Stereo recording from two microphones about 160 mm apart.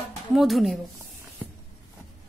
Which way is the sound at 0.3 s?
Centre (ahead or behind).